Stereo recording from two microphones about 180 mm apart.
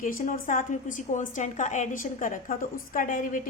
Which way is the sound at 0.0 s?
50° left (ahead or behind).